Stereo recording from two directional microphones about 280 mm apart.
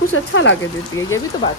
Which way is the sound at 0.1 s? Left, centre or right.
Left.